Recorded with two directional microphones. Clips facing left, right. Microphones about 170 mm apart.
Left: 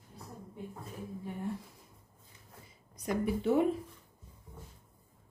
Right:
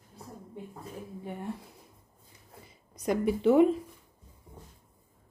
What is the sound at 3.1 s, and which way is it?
Speech, 90° right.